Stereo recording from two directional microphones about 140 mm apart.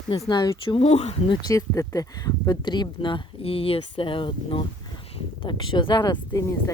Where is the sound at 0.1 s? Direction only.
30° left (ahead or behind); by 1.2 s 50° left (ahead or behind).